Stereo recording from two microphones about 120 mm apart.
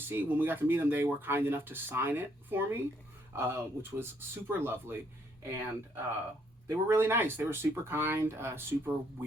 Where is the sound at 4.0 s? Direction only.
20° right (ahead or behind).